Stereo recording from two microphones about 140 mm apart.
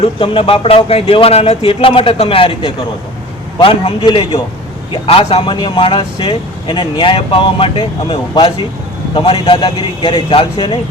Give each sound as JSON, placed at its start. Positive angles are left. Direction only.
{"t": 0.0, "sound": "speech", "side_deg": 40}